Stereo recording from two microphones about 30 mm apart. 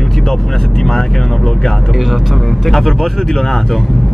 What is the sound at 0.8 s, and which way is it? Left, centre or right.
Speech, centre.